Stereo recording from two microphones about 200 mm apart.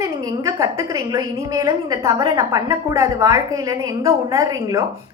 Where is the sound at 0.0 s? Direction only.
15° right (ahead or behind).